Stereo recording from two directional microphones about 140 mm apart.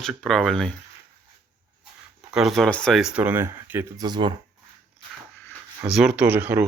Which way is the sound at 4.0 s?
30° right (ahead or behind).